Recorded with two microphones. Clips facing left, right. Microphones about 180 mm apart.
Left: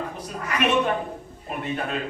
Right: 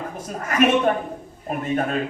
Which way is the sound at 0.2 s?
45° right (ahead or behind).